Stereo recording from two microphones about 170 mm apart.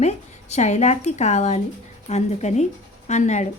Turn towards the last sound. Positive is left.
turn(degrees=45)  # may be behind; listen again after turning